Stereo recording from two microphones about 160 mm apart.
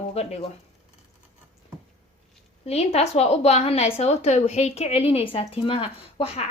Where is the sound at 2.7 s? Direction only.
40° left (ahead or behind).